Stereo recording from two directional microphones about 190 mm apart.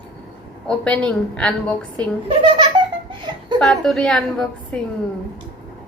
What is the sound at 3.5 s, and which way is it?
A woman's voice, centre (ahead or behind).